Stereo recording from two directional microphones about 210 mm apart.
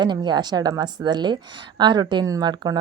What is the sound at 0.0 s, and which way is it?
A woman's voice, 20° right (ahead or behind).